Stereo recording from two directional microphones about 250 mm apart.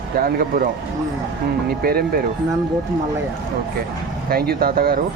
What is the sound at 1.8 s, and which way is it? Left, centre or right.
Speech, right.